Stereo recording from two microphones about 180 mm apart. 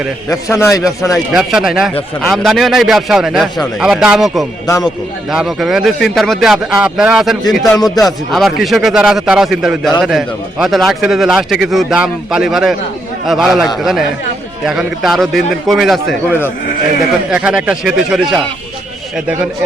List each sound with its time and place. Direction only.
0.3 s a man's voice: 15° left (ahead or behind)
1.1 s a man's voice: centre (ahead or behind)
4.6 s a man's voice: 20° left (ahead or behind)
5.3 s a man's voice: centre (ahead or behind)
17.3 s a man's voice: 5° right (ahead or behind)